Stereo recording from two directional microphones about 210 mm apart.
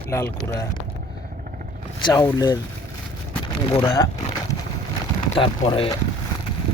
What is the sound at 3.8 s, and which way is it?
Speech, 20° left (ahead or behind).